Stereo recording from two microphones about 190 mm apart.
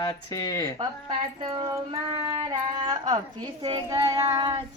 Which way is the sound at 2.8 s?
20° right (ahead or behind).